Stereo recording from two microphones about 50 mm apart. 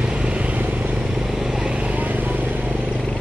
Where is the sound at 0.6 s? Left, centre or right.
Right.